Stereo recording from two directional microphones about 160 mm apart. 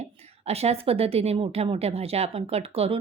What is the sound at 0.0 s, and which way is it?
A woman's voice, 40° right (ahead or behind).